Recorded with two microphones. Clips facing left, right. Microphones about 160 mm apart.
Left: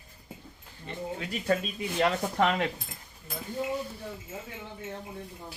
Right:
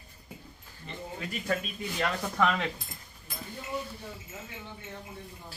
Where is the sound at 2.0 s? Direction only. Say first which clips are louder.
Left 3 dB; 30° left (ahead or behind).